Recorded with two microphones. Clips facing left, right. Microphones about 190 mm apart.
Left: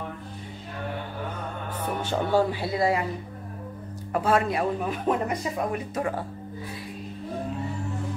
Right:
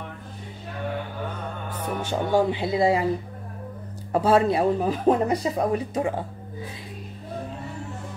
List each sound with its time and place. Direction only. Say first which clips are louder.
1.8 s music: right 1 dB; 15° right (ahead or behind)
4.1 s speech: right 4 dB; 30° right (ahead or behind)